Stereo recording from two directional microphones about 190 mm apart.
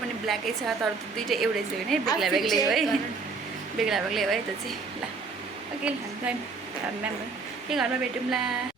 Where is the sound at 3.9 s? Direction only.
Centre (ahead or behind).